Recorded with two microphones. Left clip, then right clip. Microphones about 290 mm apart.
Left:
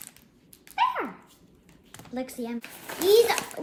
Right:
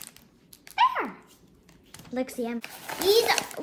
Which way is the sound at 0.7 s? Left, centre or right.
Right.